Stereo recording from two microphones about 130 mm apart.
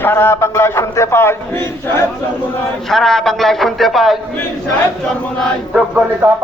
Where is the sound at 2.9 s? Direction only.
5° left (ahead or behind).